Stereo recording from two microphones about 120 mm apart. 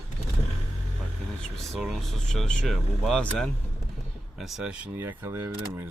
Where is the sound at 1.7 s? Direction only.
Centre (ahead or behind).